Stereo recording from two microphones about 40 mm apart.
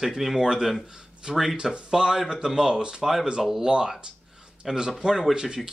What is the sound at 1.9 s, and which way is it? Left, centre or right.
Speech, centre.